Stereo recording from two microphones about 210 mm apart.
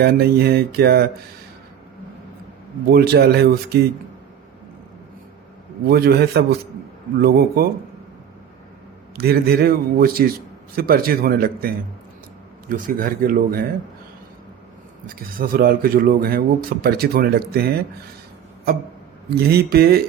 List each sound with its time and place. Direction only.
0.0 s speech: 50° right (ahead or behind)
2.9 s speech: 50° right (ahead or behind)
5.9 s speech: 45° right (ahead or behind)
9.1 s speech: 45° right (ahead or behind)
15.0 s speech: 45° right (ahead or behind)
19.3 s speech: 50° right (ahead or behind)